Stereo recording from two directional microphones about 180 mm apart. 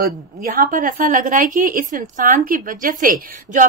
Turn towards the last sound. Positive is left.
turn(degrees=-50)  # may be behind; listen again after turning